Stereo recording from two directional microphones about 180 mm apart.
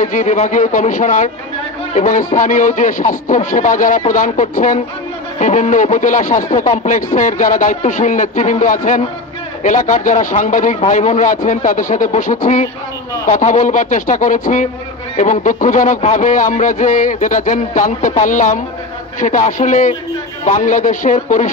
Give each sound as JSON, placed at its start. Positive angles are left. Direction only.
{"t": 0.0, "sound": "speech", "side_deg": 45}